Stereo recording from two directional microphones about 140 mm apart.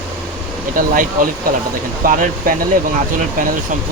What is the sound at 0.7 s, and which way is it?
Speech, 80° right.